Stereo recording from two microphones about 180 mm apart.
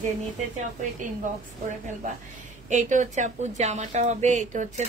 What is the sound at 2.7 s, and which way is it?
A woman's voice, 45° right (ahead or behind).